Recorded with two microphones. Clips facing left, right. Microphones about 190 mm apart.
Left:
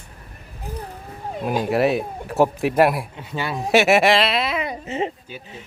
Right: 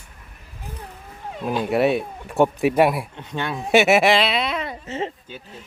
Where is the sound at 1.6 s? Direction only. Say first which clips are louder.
Right 1 dB; centre (ahead or behind).